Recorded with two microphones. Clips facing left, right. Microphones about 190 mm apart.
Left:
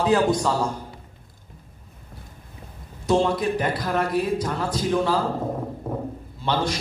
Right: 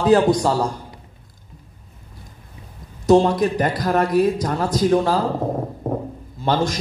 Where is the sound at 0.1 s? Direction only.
35° right (ahead or behind).